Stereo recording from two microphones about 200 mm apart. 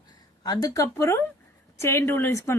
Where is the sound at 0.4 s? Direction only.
20° left (ahead or behind).